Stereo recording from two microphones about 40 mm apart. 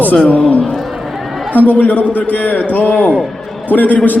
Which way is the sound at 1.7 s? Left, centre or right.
Left.